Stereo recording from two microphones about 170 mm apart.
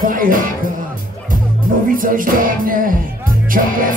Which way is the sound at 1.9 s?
55° right (ahead or behind).